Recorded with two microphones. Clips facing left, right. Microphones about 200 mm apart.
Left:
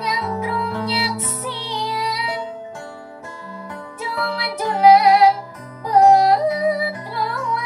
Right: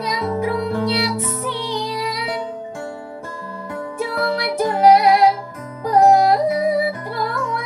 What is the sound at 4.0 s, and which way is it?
Music, 45° right (ahead or behind).